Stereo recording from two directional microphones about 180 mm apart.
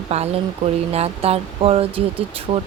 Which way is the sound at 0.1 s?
35° right (ahead or behind).